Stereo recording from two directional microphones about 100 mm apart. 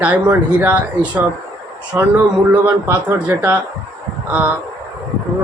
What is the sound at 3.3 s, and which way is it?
Speech, 25° right (ahead or behind).